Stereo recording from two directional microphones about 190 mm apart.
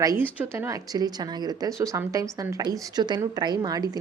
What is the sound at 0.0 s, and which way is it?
A woman's voice, 15° right (ahead or behind).